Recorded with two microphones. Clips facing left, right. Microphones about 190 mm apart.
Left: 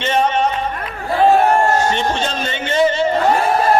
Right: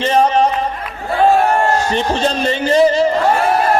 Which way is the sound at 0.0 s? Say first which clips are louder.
Right 4 dB; 35° right (ahead or behind).